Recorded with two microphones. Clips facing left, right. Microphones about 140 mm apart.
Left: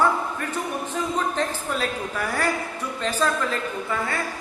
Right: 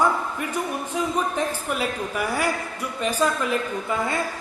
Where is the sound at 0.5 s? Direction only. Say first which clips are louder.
Right 2 dB; 10° right (ahead or behind).